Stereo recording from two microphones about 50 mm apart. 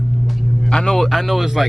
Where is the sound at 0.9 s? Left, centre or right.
Centre.